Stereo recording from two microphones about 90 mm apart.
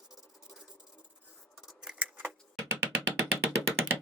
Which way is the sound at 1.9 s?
15° right (ahead or behind).